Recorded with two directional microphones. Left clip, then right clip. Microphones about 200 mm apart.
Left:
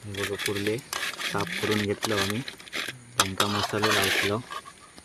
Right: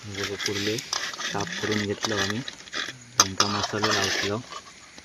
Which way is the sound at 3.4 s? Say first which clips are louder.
Even; 15° left (ahead or behind).